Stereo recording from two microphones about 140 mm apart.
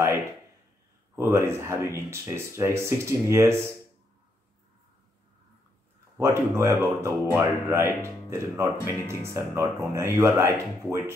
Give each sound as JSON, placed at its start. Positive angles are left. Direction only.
{"t": 1.1, "sound": "speech", "side_deg": -20}
{"t": 6.1, "sound": "speech", "side_deg": -20}